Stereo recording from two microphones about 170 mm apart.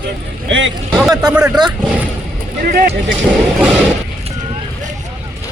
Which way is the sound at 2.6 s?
60° right (ahead or behind).